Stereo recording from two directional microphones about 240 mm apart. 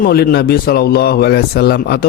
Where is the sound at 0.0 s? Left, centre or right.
Left.